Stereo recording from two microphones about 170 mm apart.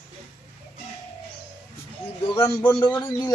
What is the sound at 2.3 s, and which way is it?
Speech, 15° left (ahead or behind).